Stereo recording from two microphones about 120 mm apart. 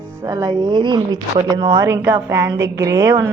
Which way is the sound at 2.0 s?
20° right (ahead or behind).